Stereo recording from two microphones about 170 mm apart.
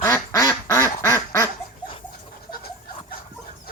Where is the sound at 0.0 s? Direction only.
20° left (ahead or behind).